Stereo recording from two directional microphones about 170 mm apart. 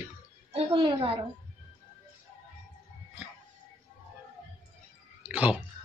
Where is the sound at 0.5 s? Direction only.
30° right (ahead or behind).